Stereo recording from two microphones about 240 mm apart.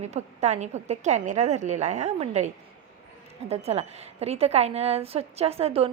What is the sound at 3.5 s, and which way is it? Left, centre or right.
A woman's voice, right.